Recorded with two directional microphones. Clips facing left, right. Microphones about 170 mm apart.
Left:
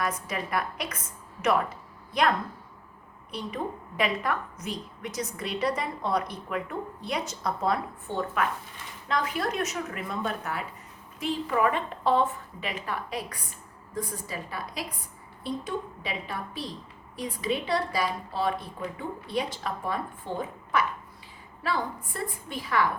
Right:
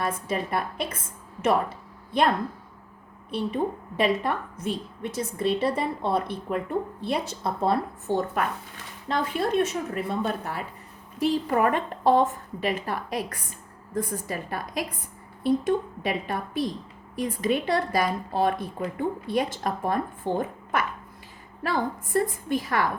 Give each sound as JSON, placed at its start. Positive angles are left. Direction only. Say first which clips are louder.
{"t": 0.0, "sound": "a woman's voice", "louder": "right 3 dB", "side_deg": -30}
{"t": 3.3, "sound": "a woman's voice", "louder": "right 6 dB", "side_deg": -25}
{"t": 8.0, "sound": "a woman's voice", "louder": "right 2 dB", "side_deg": -40}
{"t": 9.0, "sound": "a woman's voice", "louder": "right 3 dB", "side_deg": -30}
{"t": 13.9, "sound": "a woman's voice", "louder": "right 5 dB", "side_deg": -50}
{"t": 21.6, "sound": "a woman's voice", "louder": "right 3 dB", "side_deg": -45}